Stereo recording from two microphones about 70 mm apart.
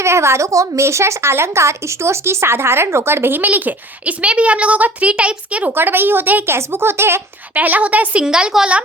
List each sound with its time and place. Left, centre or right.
0.0 s a woman's voice: right; by 5.7 s centre
5.7 s a woman's voice: right
7.5 s a woman's voice: right